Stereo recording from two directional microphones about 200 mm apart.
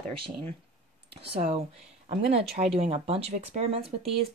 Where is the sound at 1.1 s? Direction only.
30° right (ahead or behind).